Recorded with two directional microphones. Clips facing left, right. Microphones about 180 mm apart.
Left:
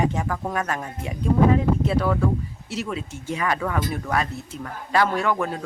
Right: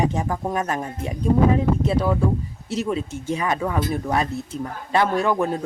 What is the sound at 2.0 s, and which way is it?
A man's voice, 15° right (ahead or behind).